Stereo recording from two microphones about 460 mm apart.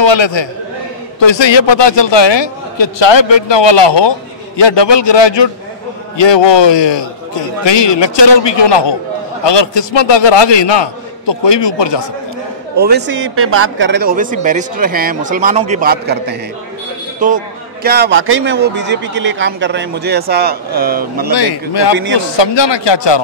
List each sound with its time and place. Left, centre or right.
0.0 s a man's voice: left
12.7 s speech: right
21.3 s a man's voice: left
21.9 s speech: right
22.4 s a man's voice: left